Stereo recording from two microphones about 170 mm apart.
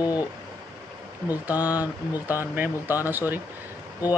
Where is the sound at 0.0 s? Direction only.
20° left (ahead or behind).